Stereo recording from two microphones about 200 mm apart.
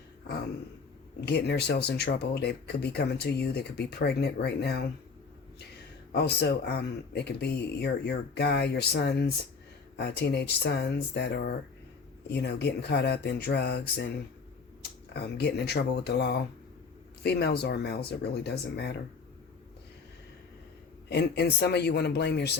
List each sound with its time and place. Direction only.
1.3 s speech: 55° left (ahead or behind)
6.1 s speech: 55° left (ahead or behind)
15.1 s speech: 55° left (ahead or behind)
21.1 s speech: 55° left (ahead or behind)